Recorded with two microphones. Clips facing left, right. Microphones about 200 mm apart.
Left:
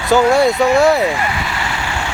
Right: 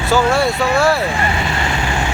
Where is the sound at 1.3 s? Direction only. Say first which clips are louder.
Right 2 dB; 25° right (ahead or behind).